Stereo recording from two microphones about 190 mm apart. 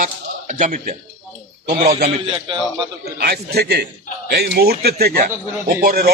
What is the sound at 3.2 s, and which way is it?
A man's voice, 55° right (ahead or behind).